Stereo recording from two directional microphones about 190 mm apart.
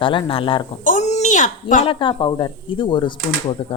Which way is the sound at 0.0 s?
25° left (ahead or behind).